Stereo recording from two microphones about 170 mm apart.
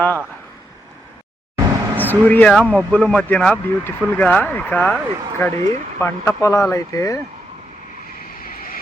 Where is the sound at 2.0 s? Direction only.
10° left (ahead or behind).